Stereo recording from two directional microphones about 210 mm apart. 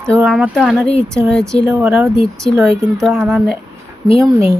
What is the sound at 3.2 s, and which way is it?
Speech, centre (ahead or behind).